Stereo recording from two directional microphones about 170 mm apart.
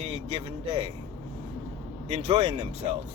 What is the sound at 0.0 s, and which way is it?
Speech, 35° right (ahead or behind).